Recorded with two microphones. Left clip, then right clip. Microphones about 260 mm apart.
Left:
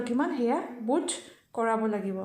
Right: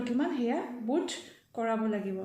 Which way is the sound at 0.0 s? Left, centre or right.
Left.